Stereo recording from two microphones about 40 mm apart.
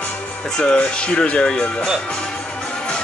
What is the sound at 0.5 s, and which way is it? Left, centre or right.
Speech, left.